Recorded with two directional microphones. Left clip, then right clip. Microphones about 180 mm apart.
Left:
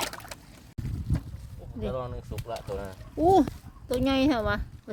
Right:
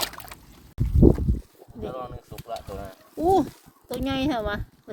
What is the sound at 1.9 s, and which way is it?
Speech, 20° left (ahead or behind).